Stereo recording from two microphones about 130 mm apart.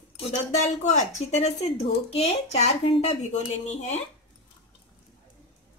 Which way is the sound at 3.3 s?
65° left (ahead or behind).